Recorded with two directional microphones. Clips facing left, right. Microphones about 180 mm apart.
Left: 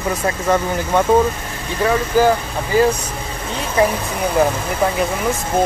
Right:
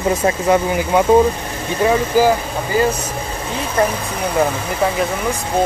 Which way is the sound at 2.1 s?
10° right (ahead or behind).